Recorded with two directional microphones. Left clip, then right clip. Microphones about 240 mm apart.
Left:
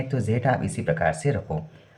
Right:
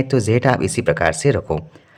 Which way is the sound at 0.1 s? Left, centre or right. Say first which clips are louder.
Right 7 dB; right.